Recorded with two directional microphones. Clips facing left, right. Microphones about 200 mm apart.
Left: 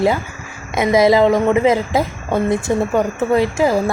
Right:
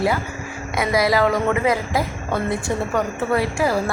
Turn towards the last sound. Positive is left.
turn(degrees=20)  # may be behind; listen again after turning